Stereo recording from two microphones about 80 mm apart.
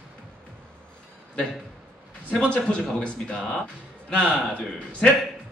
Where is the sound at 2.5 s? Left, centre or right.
Centre.